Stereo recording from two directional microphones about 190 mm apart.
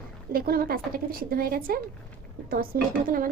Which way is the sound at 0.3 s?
50° right (ahead or behind).